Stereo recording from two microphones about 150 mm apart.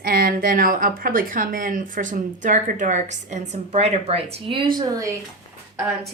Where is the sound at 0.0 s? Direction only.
80° right; by 5.1 s 25° right (ahead or behind).